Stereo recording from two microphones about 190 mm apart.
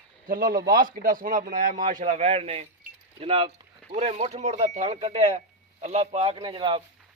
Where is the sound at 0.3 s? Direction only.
50° right (ahead or behind).